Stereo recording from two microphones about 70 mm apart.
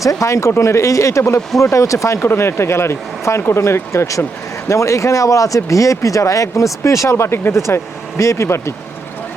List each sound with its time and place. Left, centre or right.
0.0 s speech: left
8.2 s speech: left